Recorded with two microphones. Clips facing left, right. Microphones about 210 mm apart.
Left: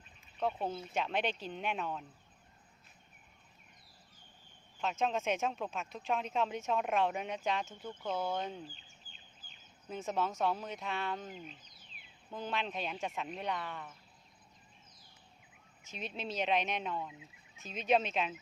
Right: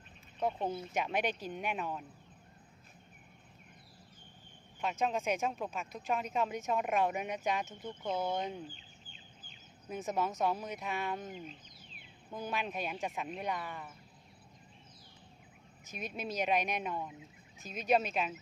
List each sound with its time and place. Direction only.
0.3 s speech: 15° right (ahead or behind)
4.8 s speech: 5° right (ahead or behind)
8.7 s chicken: 40° left (ahead or behind)
9.9 s speech: 10° right (ahead or behind)
16.0 s speech: 10° right (ahead or behind)